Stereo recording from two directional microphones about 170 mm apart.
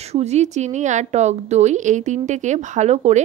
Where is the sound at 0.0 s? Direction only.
40° right (ahead or behind).